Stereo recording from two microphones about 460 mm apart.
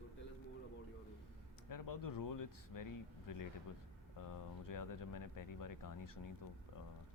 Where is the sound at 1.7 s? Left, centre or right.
Left.